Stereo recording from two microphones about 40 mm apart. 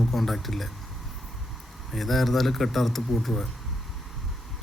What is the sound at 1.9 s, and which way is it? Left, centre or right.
A man's voice, centre.